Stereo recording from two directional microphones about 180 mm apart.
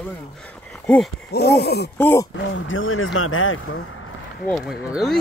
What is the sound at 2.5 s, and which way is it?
Speech, 90° left.